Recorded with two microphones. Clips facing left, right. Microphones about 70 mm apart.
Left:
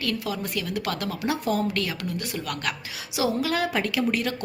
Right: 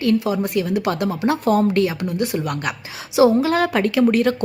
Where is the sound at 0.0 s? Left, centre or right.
Right.